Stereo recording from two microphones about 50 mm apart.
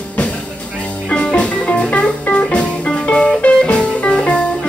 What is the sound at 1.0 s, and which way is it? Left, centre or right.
Music, centre.